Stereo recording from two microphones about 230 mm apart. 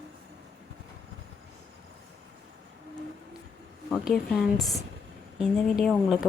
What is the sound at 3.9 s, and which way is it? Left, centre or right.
Speech, centre.